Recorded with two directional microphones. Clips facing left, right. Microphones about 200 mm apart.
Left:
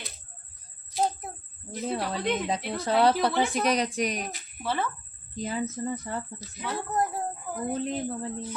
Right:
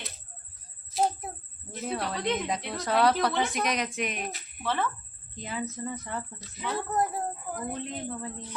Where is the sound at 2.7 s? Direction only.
30° left (ahead or behind).